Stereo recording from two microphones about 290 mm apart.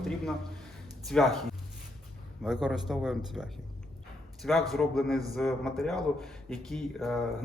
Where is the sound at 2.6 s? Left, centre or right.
Centre.